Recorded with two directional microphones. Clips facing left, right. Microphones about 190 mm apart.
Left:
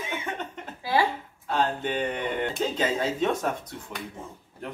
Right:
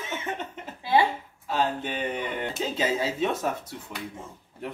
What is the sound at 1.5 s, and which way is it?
Speech, 5° right (ahead or behind).